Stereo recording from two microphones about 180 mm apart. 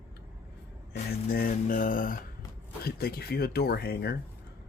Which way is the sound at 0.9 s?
55° left (ahead or behind).